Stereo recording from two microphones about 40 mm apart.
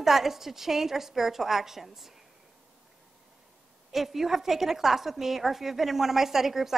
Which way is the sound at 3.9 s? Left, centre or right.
Centre.